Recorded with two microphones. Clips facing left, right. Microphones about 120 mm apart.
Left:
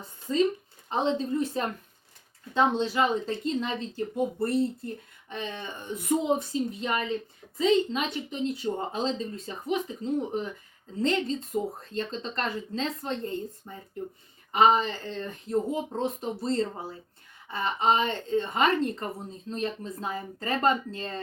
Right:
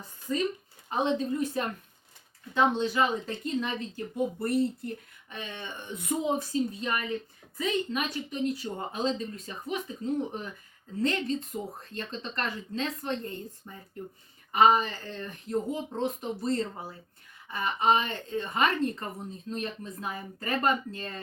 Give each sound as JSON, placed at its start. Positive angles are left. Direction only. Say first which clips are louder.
{"t": 0.3, "sound": "a woman's voice", "louder": "left 5 dB", "side_deg": 25}
{"t": 2.7, "sound": "a woman's voice", "louder": "left 2 dB", "side_deg": 30}